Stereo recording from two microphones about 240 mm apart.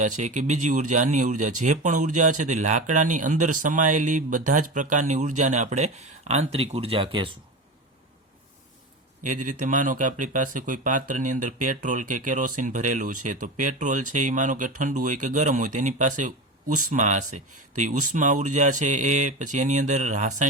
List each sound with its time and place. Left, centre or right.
0.0 s speech: right
9.2 s speech: right